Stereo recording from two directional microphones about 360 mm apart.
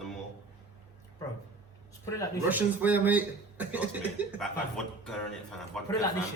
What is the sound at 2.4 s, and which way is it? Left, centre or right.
Speech, centre.